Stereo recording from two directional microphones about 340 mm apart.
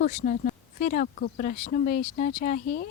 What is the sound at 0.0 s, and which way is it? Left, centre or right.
Speech, left.